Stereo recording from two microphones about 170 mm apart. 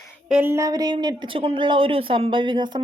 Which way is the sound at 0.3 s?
10° right (ahead or behind).